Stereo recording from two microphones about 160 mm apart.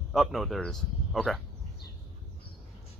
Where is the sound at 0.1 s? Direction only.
Centre (ahead or behind).